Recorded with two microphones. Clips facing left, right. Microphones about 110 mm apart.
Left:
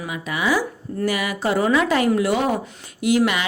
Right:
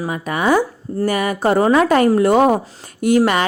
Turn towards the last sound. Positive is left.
turn(degrees=-45)  # may be behind; listen again after turning